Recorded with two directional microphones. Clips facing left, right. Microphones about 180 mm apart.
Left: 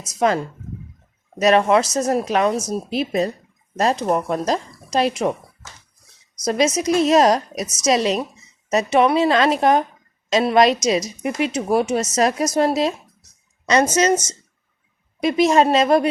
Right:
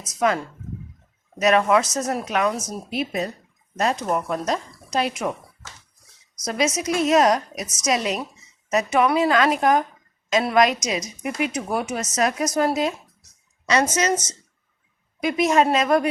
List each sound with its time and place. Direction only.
0.2 s speech: 30° left (ahead or behind)
1.4 s a woman's voice: 30° left (ahead or behind)
6.4 s a woman's voice: 35° left (ahead or behind)